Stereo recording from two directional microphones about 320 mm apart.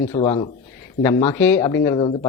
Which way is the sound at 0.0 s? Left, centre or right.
Centre.